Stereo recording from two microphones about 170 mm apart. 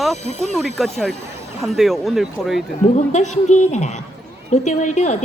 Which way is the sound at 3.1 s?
45° left (ahead or behind).